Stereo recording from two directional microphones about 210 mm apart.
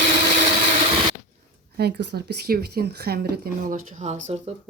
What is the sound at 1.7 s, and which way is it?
Speech, 50° right (ahead or behind).